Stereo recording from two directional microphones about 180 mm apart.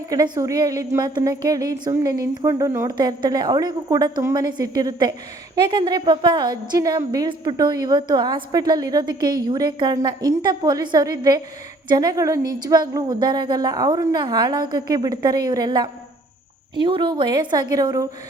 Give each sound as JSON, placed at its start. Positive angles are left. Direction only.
{"t": 0.1, "sound": "a woman's voice", "side_deg": -20}